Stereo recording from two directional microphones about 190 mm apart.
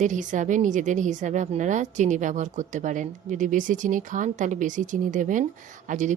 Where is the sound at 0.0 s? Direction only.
40° right (ahead or behind).